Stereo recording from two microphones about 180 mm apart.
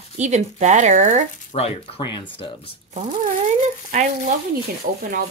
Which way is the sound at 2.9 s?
40° right (ahead or behind).